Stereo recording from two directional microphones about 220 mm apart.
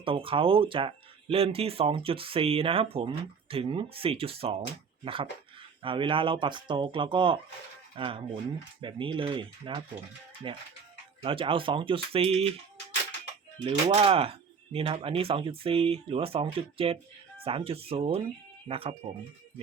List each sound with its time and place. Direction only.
0.0 s speech: 25° right (ahead or behind)
13.7 s speech: 25° right (ahead or behind)